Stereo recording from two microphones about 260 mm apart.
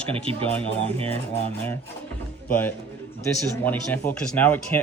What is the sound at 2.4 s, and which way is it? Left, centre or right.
A man's voice, centre.